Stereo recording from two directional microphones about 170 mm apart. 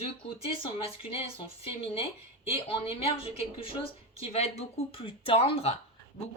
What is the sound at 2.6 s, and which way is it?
Speech, 35° left (ahead or behind).